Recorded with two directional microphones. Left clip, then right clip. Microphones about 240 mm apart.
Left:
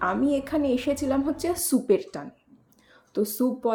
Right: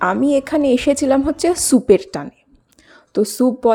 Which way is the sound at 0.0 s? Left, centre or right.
Right.